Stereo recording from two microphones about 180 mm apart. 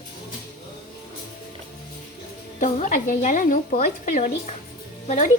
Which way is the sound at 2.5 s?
45° left (ahead or behind).